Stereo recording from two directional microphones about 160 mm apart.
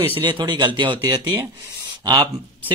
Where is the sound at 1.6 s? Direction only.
20° right (ahead or behind).